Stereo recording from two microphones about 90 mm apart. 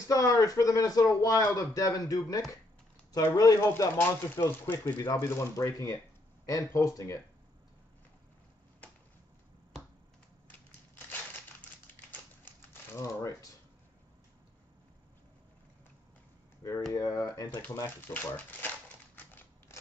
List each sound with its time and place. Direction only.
0.0 s speech: 40° left (ahead or behind)
13.0 s speech: 35° left (ahead or behind)
16.9 s speech: 40° left (ahead or behind)
17.8 s speech: 25° left (ahead or behind)